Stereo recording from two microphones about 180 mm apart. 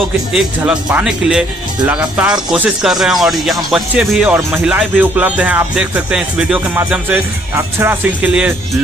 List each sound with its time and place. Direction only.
0.3 s speech: 5° right (ahead or behind)